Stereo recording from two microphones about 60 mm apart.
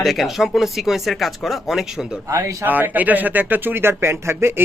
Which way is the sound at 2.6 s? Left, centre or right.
Right.